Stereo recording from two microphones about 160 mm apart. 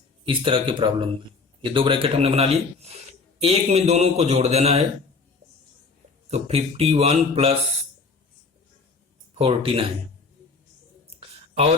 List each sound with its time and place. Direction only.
0.3 s a man's voice: 35° right (ahead or behind)
6.3 s speech: 40° right (ahead or behind)
9.4 s speech: 35° right (ahead or behind)